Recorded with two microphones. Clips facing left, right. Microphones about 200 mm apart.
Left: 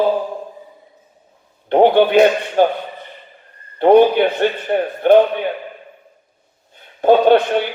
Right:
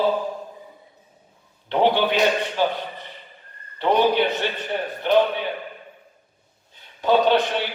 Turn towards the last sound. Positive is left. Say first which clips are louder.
# left 7 dB
turn(degrees=50)  # may be behind; listen again after turning